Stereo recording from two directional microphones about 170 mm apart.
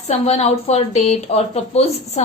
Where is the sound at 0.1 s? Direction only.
40° left (ahead or behind).